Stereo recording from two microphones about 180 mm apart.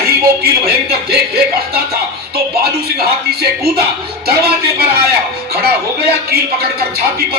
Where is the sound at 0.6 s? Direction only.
60° right (ahead or behind).